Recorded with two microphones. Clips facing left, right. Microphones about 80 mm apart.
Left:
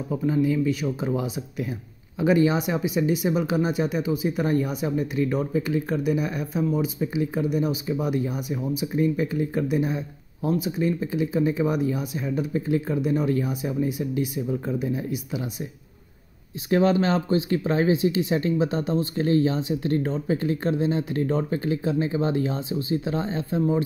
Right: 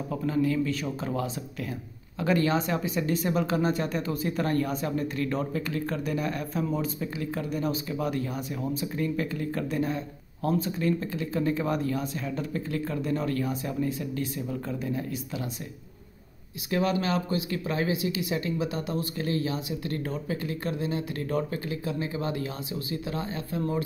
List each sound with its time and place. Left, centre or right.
0.1 s speech: centre
16.7 s speech: left